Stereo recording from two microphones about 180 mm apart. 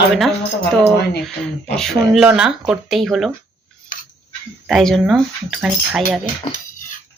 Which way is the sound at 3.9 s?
45° left (ahead or behind).